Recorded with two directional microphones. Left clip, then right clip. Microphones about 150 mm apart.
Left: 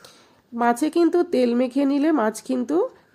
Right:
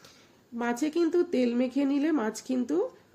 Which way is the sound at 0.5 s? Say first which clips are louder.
Left 9 dB; 40° left (ahead or behind).